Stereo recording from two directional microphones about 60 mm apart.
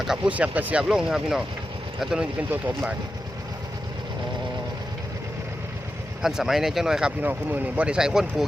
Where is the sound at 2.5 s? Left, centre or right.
Right.